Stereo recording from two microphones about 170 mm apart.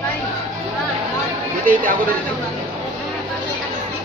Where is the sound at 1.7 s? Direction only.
55° right (ahead or behind).